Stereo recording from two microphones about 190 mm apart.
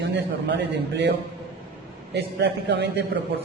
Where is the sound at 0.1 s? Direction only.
65° right (ahead or behind).